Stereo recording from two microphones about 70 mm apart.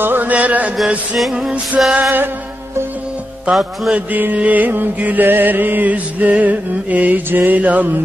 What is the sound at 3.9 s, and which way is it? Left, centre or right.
Music, right.